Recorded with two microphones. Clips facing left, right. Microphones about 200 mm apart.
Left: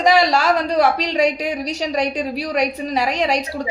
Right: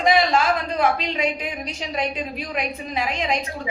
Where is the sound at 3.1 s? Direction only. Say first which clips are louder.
Left 4 dB; 75° left (ahead or behind).